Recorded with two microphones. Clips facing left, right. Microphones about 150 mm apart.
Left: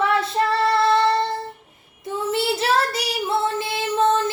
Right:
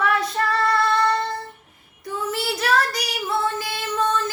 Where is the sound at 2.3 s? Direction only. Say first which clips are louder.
Left 2 dB; 25° left (ahead or behind).